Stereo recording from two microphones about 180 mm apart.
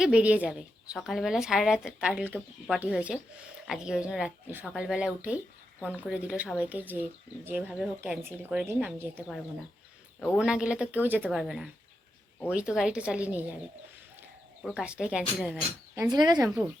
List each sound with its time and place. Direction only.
0.0 s a woman's voice: 5° right (ahead or behind)
10.3 s a woman's voice: 5° right (ahead or behind)
14.6 s a woman's voice: 5° right (ahead or behind)
16.0 s speech: 25° right (ahead or behind)
16.4 s a woman's voice: centre (ahead or behind)